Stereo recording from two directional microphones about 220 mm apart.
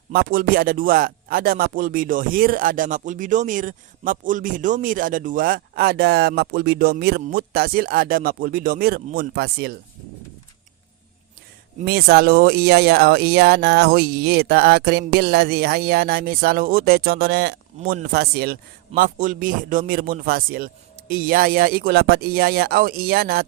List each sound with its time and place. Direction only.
0.1 s speech: 40° right (ahead or behind)
11.8 s speech: 45° right (ahead or behind)